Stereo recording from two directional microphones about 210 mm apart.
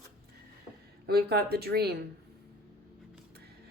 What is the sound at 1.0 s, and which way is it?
Speech, 50° right (ahead or behind).